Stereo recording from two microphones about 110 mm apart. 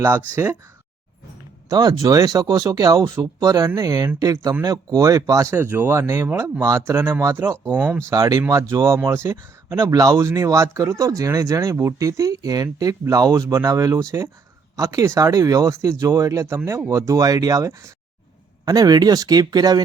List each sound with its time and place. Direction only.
1.7 s speech: 35° right (ahead or behind)
7.6 s speech: 20° right (ahead or behind)
8.1 s speech: 35° right (ahead or behind)